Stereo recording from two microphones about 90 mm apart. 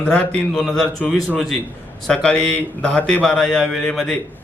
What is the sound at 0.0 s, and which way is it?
A man's voice, 10° left (ahead or behind).